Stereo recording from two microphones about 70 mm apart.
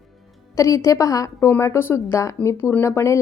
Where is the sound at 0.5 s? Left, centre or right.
Left.